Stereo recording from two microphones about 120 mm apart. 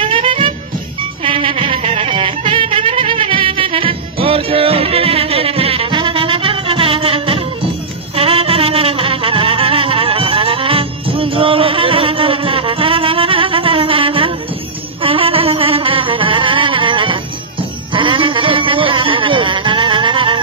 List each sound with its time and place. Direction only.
0.0 s music: 50° right (ahead or behind)